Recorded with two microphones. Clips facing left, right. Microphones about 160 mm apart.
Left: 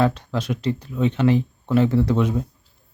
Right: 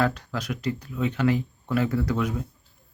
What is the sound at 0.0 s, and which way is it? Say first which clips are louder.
Speech: left 5 dB; 25° left (ahead or behind).